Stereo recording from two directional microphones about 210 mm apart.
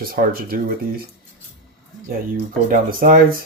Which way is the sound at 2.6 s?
40° right (ahead or behind).